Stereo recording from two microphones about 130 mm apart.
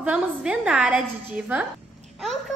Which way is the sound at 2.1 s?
Centre (ahead or behind).